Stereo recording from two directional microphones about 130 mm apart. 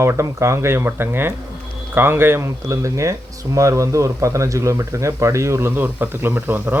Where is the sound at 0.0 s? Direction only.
20° right (ahead or behind).